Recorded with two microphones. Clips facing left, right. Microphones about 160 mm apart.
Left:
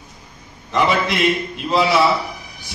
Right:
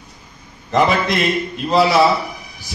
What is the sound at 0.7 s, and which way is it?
Speech, 40° right (ahead or behind).